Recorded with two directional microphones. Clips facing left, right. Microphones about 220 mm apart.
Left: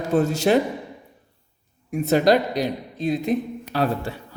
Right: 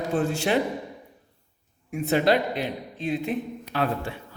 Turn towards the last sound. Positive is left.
turn(degrees=40)  # may be behind; listen again after turning